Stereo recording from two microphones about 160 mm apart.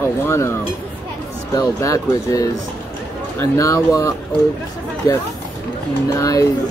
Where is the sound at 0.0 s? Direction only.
15° left (ahead or behind).